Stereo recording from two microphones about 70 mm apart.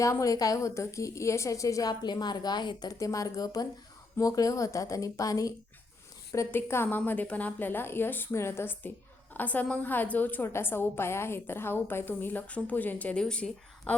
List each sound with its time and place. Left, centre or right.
0.0 s a woman's voice: left
1.9 s a woman's voice: left
3.0 s a woman's voice: left
6.5 s a woman's voice: left
6.8 s a woman's voice: left
8.3 s a woman's voice: left
9.3 s a woman's voice: left